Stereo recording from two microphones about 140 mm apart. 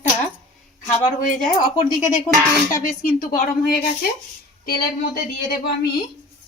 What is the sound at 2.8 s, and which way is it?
Speech, 90° left.